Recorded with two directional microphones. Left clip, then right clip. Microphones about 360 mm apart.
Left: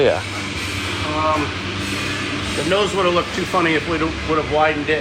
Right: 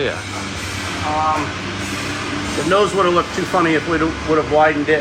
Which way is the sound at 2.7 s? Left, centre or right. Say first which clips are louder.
Right 3 dB; right.